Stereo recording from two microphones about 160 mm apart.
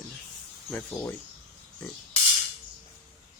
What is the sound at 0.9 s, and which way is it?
Speech, 15° left (ahead or behind).